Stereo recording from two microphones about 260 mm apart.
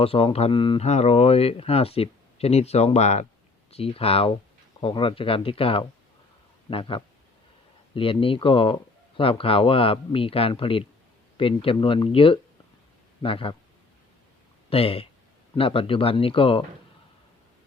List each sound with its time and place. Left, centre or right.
0.0 s speech: left
14.7 s speech: left